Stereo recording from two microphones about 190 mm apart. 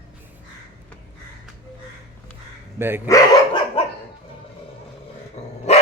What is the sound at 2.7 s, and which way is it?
Speech, 10° right (ahead or behind).